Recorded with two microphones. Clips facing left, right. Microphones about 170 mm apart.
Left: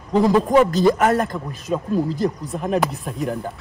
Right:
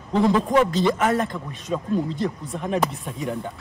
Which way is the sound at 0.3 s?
40° left (ahead or behind).